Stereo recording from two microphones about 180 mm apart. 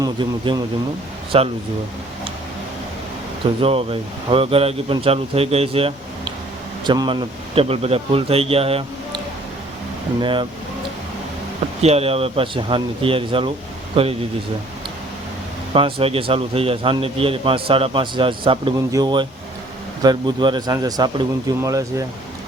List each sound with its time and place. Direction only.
0.0 s a man's voice: 25° right (ahead or behind)
3.6 s a man's voice: 30° right (ahead or behind)
11.8 s a man's voice: 35° right (ahead or behind)
15.7 s a man's voice: 30° right (ahead or behind)